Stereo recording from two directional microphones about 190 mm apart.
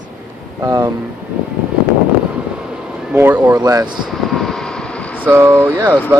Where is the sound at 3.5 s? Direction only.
20° right (ahead or behind).